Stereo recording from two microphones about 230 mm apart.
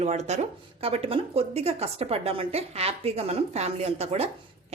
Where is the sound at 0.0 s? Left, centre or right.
Right.